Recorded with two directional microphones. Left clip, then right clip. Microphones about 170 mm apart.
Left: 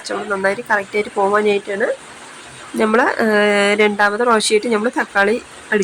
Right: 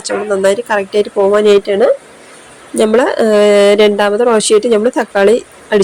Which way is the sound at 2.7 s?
40° right (ahead or behind).